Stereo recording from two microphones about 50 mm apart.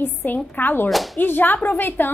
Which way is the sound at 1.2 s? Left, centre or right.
Left.